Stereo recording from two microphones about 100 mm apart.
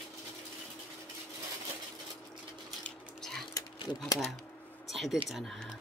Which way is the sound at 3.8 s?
50° left (ahead or behind).